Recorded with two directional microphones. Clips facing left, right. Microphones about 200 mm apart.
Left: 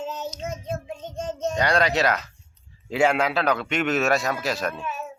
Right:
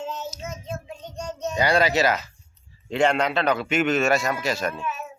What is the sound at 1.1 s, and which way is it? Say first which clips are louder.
Child singing: left 3 dB; 50° left (ahead or behind).